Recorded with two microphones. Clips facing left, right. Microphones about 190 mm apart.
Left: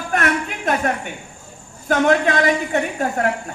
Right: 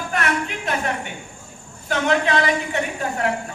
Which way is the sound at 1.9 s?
45° left (ahead or behind).